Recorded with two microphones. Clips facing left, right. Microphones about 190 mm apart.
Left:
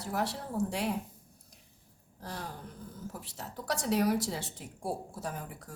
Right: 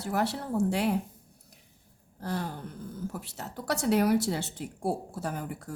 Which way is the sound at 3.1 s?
65° right (ahead or behind).